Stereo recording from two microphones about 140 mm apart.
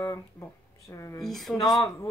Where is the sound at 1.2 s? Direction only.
Centre (ahead or behind).